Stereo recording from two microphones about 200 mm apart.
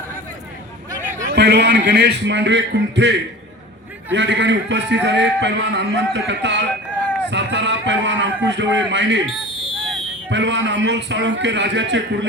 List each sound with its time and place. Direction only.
1.3 s a man's voice: 60° right (ahead or behind)
10.2 s a man's voice: 65° right (ahead or behind)